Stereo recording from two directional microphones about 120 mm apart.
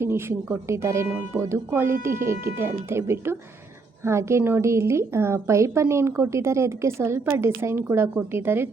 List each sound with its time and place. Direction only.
0.0 s a woman's voice: 20° right (ahead or behind)